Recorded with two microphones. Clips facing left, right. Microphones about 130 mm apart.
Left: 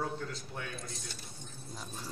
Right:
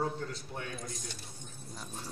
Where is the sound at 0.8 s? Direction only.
15° right (ahead or behind).